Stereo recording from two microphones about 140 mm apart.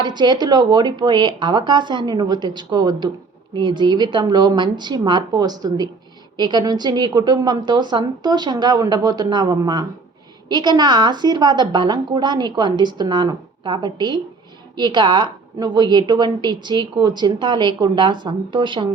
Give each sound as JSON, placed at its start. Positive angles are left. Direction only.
{"t": 0.0, "sound": "a woman's voice", "side_deg": -30}